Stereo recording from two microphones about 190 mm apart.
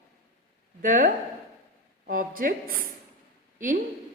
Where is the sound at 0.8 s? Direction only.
45° right (ahead or behind).